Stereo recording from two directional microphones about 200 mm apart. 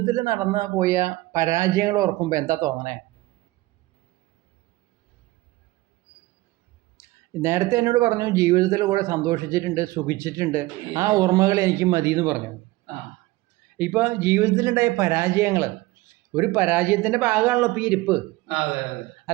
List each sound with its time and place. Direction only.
0.0 s speech: 15° right (ahead or behind)
6.9 s speech: 15° right (ahead or behind)
13.7 s speech: 10° right (ahead or behind)